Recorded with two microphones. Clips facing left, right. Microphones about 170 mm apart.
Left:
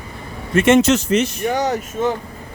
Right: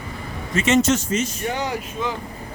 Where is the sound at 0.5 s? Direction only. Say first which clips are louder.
Left 5 dB; 55° left (ahead or behind).